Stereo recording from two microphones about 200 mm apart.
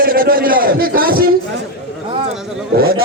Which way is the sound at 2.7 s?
50° right (ahead or behind).